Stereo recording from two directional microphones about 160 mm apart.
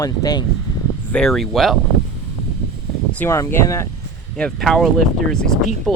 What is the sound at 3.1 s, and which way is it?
Speech, 15° left (ahead or behind).